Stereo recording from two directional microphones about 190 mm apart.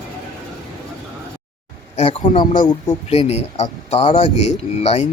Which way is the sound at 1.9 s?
35° left (ahead or behind).